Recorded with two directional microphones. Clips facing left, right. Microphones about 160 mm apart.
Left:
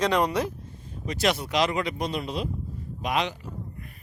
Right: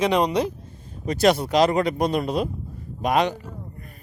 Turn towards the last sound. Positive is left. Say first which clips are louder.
# right 6 dB
turn(degrees=-45)  # may be behind; listen again after turning